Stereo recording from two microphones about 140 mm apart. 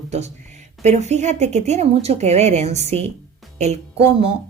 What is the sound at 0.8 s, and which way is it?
Speech, 55° right (ahead or behind).